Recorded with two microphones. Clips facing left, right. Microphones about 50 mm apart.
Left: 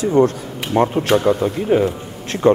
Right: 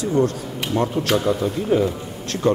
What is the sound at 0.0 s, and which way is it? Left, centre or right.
A man's voice, left.